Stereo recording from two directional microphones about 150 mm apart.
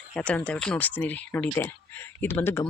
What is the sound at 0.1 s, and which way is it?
Speech, 10° left (ahead or behind).